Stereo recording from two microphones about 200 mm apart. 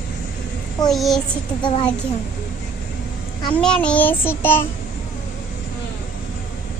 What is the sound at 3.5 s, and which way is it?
Child singing, 5° left (ahead or behind).